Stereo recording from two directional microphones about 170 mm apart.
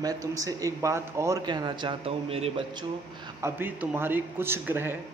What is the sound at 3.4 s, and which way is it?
A man's voice, 10° right (ahead or behind).